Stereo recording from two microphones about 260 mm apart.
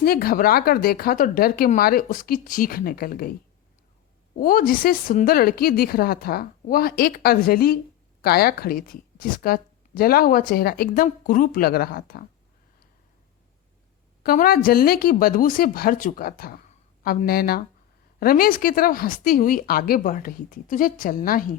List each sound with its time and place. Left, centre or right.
0.0 s a woman's voice: left
4.4 s a woman's voice: left
14.3 s a woman's voice: left